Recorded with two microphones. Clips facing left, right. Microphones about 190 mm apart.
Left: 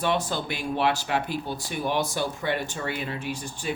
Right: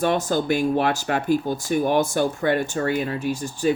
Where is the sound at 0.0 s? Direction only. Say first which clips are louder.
Right 5 dB; 45° right (ahead or behind).